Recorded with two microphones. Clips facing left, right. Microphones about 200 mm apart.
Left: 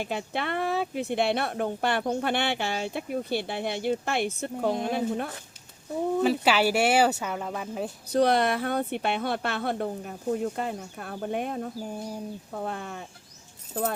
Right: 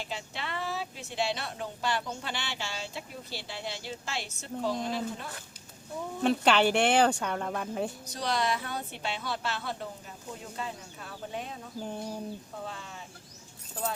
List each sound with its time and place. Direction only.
0.0 s speech: 55° left (ahead or behind)
6.2 s speech: 5° left (ahead or behind)
8.1 s speech: 55° left (ahead or behind)
11.8 s speech: 10° left (ahead or behind)
12.5 s speech: 55° left (ahead or behind)